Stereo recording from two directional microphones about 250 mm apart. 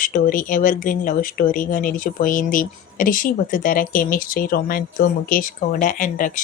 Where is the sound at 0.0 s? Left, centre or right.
Left.